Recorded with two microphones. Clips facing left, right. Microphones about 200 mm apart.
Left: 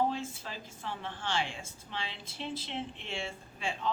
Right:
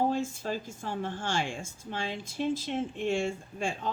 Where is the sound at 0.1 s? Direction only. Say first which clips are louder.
Right 7 dB; 45° right (ahead or behind).